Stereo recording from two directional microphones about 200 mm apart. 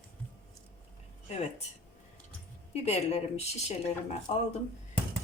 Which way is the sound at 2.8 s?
35° left (ahead or behind).